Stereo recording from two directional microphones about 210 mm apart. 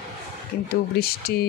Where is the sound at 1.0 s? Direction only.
45° left (ahead or behind).